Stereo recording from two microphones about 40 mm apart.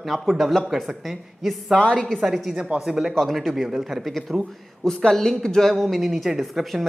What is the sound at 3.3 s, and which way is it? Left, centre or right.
Speech, centre.